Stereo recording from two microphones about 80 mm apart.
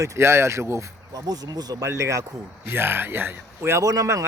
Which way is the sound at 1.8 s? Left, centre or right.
Right.